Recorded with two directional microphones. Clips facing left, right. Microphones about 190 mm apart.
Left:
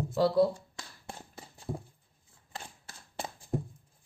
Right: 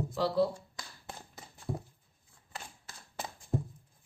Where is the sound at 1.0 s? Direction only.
30° left (ahead or behind).